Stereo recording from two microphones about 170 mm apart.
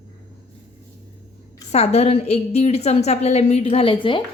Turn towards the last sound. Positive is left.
turn(degrees=30)  # may be behind; listen again after turning